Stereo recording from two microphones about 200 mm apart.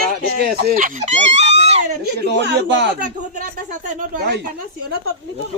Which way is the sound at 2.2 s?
60° right (ahead or behind).